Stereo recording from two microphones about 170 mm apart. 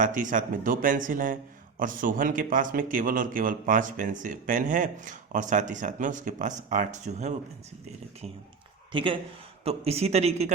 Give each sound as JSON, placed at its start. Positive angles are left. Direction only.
{"t": 0.0, "sound": "a man's voice", "side_deg": -50}
{"t": 8.9, "sound": "speech", "side_deg": -30}